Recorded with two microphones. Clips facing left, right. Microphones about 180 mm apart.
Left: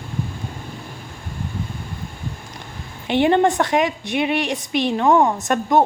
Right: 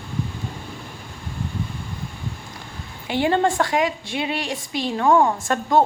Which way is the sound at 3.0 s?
20° left (ahead or behind).